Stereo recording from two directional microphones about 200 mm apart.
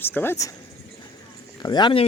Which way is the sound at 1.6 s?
20° left (ahead or behind).